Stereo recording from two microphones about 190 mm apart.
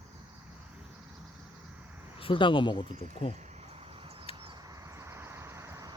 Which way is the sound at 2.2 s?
25° left (ahead or behind).